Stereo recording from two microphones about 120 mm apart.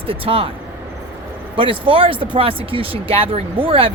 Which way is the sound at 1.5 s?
45° right (ahead or behind).